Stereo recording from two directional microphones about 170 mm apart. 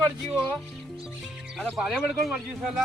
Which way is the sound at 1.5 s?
Centre (ahead or behind).